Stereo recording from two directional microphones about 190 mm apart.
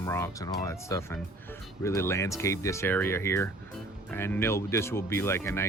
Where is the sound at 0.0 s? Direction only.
15° left (ahead or behind).